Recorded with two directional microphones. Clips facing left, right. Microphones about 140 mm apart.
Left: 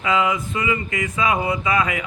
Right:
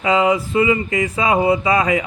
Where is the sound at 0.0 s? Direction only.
35° right (ahead or behind).